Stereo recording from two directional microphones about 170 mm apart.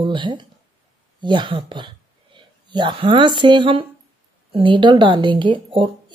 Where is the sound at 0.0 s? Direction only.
30° right (ahead or behind).